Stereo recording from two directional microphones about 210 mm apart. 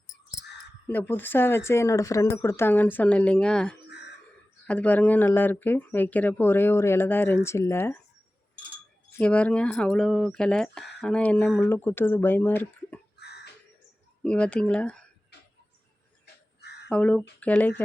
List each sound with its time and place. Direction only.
0.9 s speech: 10° left (ahead or behind)
3.8 s a sound: 55° left (ahead or behind)
4.6 s speech: 5° left (ahead or behind)
9.1 s speech: 5° left (ahead or behind)
13.1 s a sound: 50° left (ahead or behind)
14.2 s speech: 5° left (ahead or behind)
16.2 s crow: 50° left (ahead or behind)
16.9 s speech: 5° left (ahead or behind)